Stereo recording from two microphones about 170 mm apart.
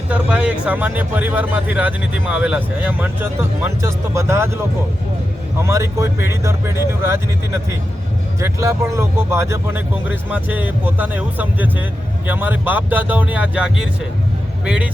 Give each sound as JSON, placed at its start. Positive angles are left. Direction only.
{"t": 0.1, "sound": "speech", "side_deg": -5}
{"t": 5.6, "sound": "speech", "side_deg": -15}
{"t": 8.4, "sound": "speech", "side_deg": -15}